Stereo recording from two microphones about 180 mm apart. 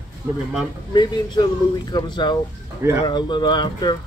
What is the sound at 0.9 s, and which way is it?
Speech, 25° left (ahead or behind).